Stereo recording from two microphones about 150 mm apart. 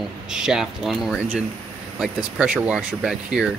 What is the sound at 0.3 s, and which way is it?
Speech, 5° right (ahead or behind).